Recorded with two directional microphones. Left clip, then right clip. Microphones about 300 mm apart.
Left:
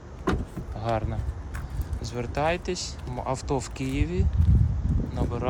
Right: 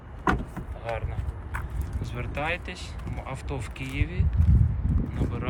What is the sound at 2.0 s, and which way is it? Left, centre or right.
Speech, centre.